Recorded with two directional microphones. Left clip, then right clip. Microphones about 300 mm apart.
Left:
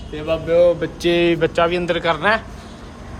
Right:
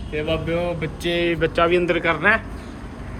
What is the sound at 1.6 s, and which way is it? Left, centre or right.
Speech, centre.